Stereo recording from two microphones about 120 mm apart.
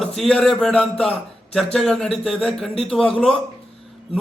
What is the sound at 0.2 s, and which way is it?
A man's voice, 5° left (ahead or behind).